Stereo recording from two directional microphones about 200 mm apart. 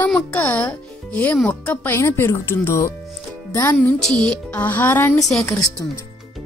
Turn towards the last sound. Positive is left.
turn(degrees=5)  # may be behind; listen again after turning